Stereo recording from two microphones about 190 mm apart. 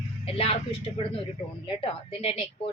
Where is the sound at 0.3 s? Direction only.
30° left (ahead or behind).